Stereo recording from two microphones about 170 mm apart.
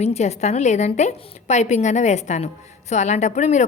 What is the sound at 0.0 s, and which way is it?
A woman's voice, 40° left (ahead or behind).